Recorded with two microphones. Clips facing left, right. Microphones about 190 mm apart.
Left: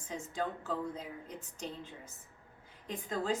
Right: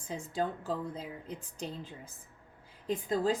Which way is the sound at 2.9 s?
35° right (ahead or behind).